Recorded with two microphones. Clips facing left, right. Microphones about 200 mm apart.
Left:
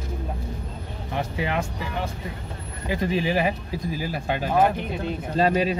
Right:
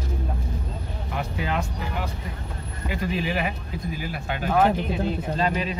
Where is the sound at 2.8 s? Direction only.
30° left (ahead or behind).